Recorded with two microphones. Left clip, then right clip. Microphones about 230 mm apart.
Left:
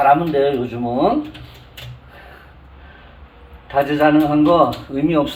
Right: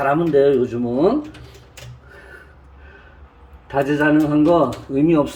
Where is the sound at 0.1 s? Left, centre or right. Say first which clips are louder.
Left 1 dB; centre.